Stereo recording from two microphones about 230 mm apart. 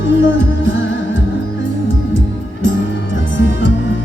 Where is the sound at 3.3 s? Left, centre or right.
Left.